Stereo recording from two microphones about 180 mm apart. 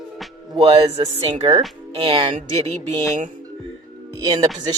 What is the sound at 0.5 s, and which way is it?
Speech, 30° right (ahead or behind).